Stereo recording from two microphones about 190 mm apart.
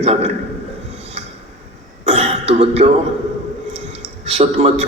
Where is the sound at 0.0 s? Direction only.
35° right (ahead or behind).